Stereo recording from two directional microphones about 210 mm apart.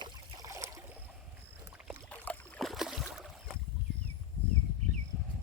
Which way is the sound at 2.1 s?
5° left (ahead or behind).